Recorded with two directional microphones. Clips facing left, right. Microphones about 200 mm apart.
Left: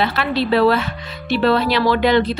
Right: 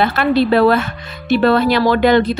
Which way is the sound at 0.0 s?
50° right (ahead or behind).